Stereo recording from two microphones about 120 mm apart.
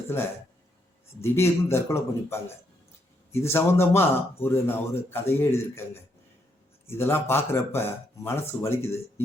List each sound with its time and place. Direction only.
1.2 s speech: 20° left (ahead or behind)
3.4 s speech: 20° left (ahead or behind)